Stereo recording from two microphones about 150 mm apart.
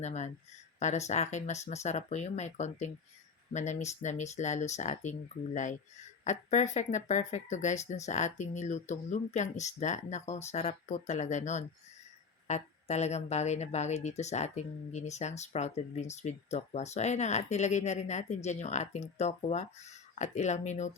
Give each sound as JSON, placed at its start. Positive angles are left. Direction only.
{"t": 0.0, "sound": "speech", "side_deg": 50}
{"t": 6.2, "sound": "speech", "side_deg": 50}